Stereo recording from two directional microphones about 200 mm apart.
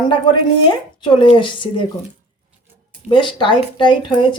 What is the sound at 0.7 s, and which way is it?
Speech, 25° left (ahead or behind).